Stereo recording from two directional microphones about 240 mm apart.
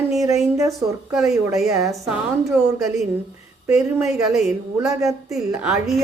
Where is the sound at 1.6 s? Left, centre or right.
Centre.